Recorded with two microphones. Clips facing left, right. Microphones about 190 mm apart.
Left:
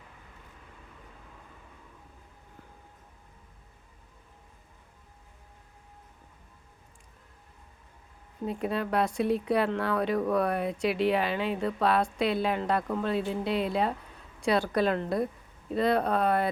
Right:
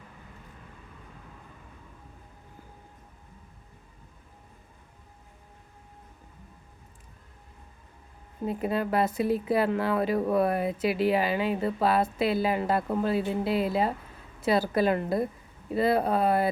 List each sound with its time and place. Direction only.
8.4 s speech: centre (ahead or behind)